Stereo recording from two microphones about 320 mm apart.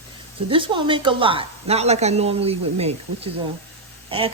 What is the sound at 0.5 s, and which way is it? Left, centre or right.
A woman's voice, centre.